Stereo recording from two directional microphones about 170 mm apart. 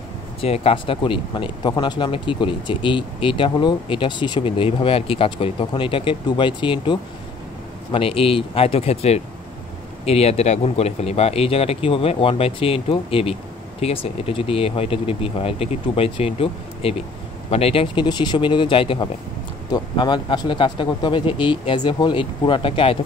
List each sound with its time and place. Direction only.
0.4 s speech: 35° left (ahead or behind)